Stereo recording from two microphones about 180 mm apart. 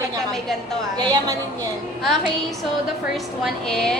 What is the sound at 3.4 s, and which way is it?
Speech, 5° left (ahead or behind).